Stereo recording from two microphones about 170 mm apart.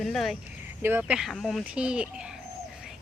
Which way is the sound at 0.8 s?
10° right (ahead or behind).